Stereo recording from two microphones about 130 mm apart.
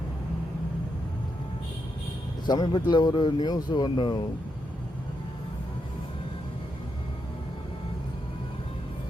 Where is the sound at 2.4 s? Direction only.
35° left (ahead or behind).